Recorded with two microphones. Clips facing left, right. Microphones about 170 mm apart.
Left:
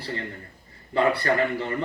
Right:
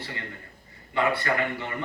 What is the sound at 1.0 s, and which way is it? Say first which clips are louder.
Speech: left 4 dB; 35° left (ahead or behind).